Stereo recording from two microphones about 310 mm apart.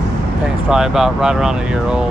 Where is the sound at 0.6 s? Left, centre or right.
Centre.